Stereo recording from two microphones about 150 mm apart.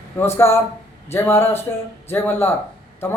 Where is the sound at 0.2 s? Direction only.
15° left (ahead or behind).